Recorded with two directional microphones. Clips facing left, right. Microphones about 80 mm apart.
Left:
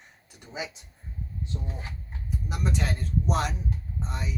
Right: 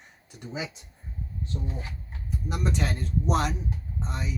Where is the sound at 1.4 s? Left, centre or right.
Left.